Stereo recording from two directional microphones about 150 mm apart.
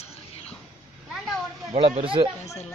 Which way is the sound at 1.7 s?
45° right (ahead or behind).